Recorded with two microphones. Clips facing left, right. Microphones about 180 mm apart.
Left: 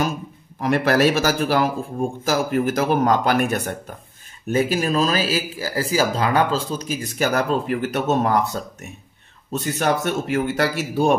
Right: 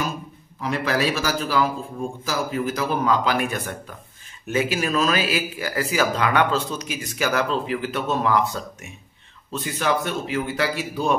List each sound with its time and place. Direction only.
0.6 s a man's voice: 55° left (ahead or behind)